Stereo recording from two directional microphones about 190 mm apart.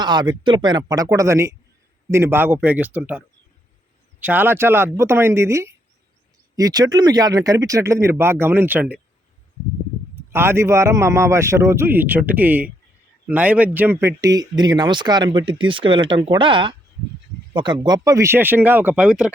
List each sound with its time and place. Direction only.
0.0 s a man's voice: 20° right (ahead or behind)
10.3 s a man's voice: 15° right (ahead or behind)